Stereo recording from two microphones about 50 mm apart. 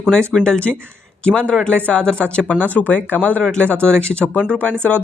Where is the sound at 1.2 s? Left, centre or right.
Left.